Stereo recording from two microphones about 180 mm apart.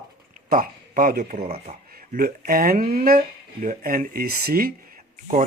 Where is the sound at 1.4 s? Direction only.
35° right (ahead or behind).